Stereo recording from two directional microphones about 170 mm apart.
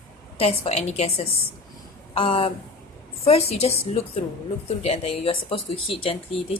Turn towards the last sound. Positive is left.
turn(degrees=30)  # may be behind; listen again after turning